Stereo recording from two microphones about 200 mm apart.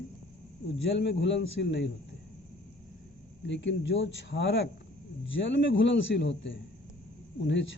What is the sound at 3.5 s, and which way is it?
A man's voice, 65° left (ahead or behind).